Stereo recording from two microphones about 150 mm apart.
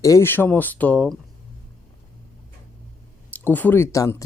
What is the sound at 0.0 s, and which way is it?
Speech, 20° left (ahead or behind).